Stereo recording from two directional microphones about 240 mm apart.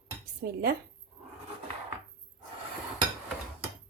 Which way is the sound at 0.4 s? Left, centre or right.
Right.